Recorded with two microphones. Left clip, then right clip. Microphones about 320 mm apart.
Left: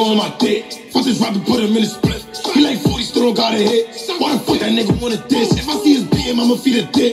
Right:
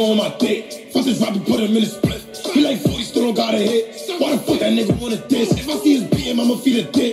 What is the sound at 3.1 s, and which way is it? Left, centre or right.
Music, centre.